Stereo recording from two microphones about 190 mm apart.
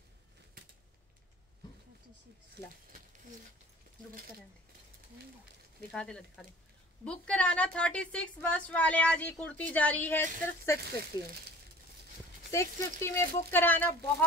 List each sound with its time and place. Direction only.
5.8 s a woman's voice: 5° left (ahead or behind); by 11.3 s 20° left (ahead or behind)
12.4 s a woman's voice: 15° left (ahead or behind)